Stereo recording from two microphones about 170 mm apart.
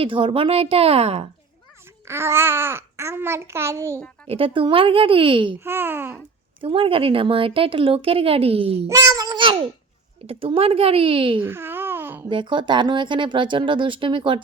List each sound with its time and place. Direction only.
0.0 s speech: 30° right (ahead or behind)
2.0 s a child's voice: 15° right (ahead or behind)
4.3 s speech: 35° right (ahead or behind)
5.5 s a child's voice: 15° right (ahead or behind)
6.6 s speech: 30° right (ahead or behind)
8.9 s speech: 20° right (ahead or behind)
11.3 s babbling: 15° right (ahead or behind)
12.3 s speech: 30° right (ahead or behind)